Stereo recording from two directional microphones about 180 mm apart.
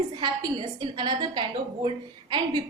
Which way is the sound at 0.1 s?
30° right (ahead or behind).